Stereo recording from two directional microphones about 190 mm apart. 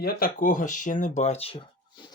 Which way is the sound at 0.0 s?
45° left (ahead or behind).